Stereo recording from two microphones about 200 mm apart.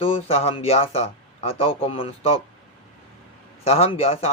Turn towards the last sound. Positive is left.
turn(degrees=30)  # may be behind; listen again after turning